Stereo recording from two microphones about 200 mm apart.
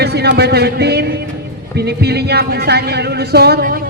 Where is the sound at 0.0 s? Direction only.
55° right (ahead or behind).